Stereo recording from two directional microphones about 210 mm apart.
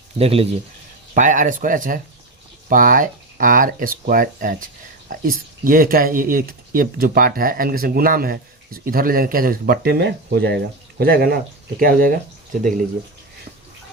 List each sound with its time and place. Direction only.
0.2 s speech: 25° right (ahead or behind); by 12.2 s 45° right (ahead or behind)